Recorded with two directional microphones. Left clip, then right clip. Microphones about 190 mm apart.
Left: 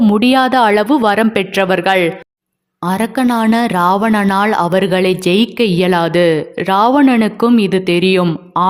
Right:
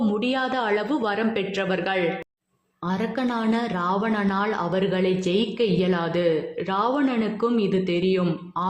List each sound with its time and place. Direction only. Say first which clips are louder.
0.0 s speech: left 13 dB; 40° left (ahead or behind)